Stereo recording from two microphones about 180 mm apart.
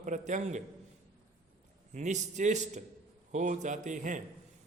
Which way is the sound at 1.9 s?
40° right (ahead or behind).